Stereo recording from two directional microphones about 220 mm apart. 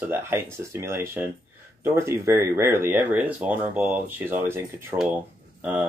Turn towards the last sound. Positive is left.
turn(degrees=-10)  # may be behind; listen again after turning